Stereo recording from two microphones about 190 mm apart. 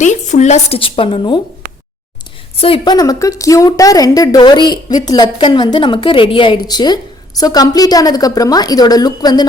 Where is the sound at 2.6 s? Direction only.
30° left (ahead or behind).